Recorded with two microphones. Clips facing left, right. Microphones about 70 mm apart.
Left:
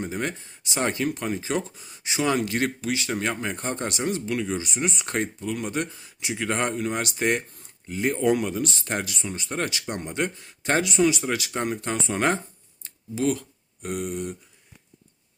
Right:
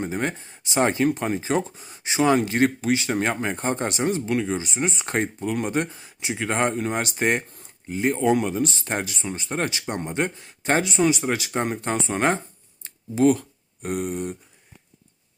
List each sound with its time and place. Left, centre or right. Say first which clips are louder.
0.0 s speech: right 3 dB; right
12.8 s a sound: right 6 dB; right
13.8 s speech: right 3 dB; right